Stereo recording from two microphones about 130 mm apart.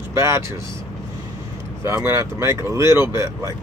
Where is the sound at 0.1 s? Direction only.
20° right (ahead or behind).